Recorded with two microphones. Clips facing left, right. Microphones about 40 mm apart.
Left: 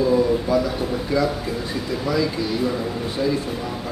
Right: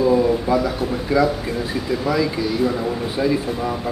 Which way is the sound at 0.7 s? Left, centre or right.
Centre.